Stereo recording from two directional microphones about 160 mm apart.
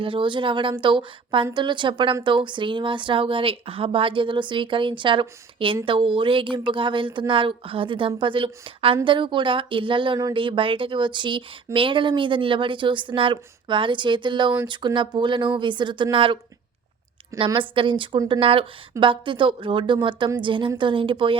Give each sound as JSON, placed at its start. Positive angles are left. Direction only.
{"t": 0.0, "sound": "speech", "side_deg": -30}